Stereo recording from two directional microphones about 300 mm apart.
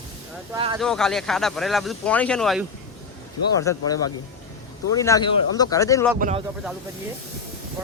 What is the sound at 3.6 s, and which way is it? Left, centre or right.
Speech, centre.